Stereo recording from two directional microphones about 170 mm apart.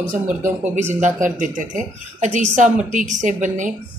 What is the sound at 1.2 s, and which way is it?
Speech, 50° right (ahead or behind).